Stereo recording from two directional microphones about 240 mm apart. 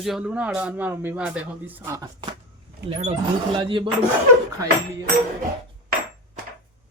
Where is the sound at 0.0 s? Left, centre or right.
Centre.